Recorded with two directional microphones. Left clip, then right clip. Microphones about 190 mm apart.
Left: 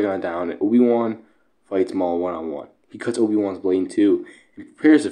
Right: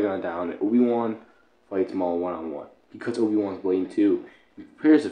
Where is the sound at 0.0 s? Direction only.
30° left (ahead or behind).